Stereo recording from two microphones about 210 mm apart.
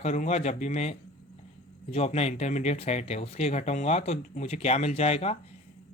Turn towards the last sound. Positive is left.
turn(degrees=30)  # may be behind; listen again after turning